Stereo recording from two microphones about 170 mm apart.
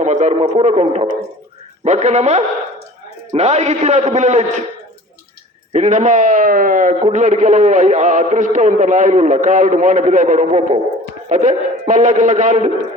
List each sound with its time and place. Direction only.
0.0 s a man's voice: 45° right (ahead or behind)
5.7 s a man's voice: 45° right (ahead or behind)